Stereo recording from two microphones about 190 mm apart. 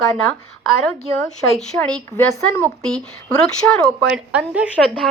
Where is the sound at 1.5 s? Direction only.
5° left (ahead or behind).